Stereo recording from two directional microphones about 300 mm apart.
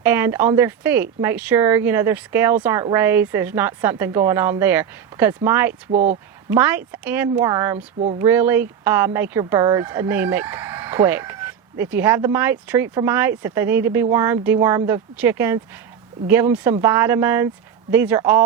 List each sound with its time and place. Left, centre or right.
0.0 s speech: centre
5.9 s speech: right
6.5 s speech: centre